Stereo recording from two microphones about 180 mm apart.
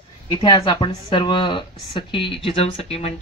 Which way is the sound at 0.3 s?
25° left (ahead or behind).